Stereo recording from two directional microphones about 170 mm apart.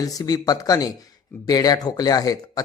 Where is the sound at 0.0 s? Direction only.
20° left (ahead or behind).